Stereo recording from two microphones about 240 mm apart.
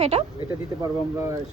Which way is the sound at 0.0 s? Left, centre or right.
Right.